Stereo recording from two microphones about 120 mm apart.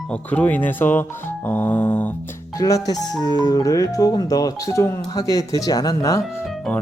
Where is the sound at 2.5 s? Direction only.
30° left (ahead or behind).